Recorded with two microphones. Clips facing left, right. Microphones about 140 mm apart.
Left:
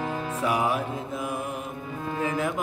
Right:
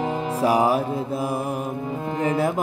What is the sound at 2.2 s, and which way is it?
Music, 35° right (ahead or behind).